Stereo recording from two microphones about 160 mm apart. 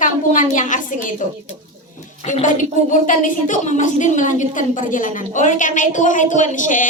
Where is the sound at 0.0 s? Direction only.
55° left (ahead or behind).